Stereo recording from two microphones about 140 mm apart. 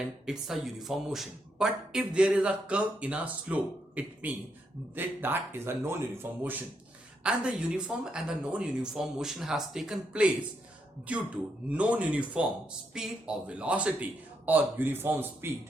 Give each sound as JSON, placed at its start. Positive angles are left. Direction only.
{"t": 0.3, "sound": "speech", "side_deg": 0}